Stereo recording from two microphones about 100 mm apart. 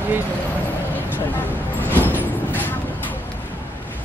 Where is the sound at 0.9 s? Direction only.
20° left (ahead or behind).